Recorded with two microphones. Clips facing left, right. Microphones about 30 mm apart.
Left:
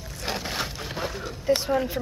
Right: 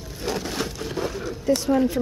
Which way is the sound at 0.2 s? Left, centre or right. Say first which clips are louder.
Right 2 dB; centre.